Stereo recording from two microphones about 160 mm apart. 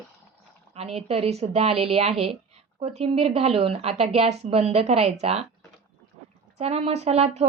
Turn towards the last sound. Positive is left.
turn(degrees=-40)  # may be behind; listen again after turning